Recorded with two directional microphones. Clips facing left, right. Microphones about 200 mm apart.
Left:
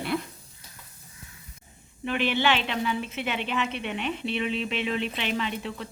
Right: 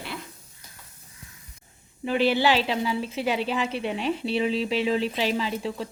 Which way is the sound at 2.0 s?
35° right (ahead or behind).